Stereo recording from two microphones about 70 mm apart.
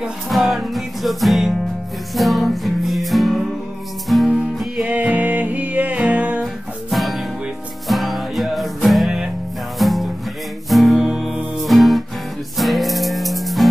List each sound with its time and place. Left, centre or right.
0.3 s music: centre
4.8 s music: right
6.4 s music: centre